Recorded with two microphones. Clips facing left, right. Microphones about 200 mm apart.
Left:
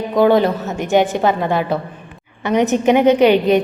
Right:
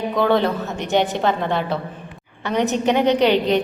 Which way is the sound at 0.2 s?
15° left (ahead or behind).